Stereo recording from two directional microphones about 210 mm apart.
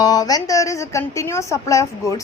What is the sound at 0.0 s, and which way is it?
A woman's voice, 15° left (ahead or behind).